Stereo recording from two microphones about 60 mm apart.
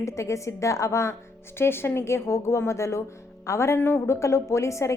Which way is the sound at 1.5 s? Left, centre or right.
Left.